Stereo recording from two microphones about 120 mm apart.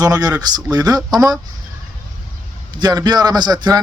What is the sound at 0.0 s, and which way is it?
Speech, 30° right (ahead or behind).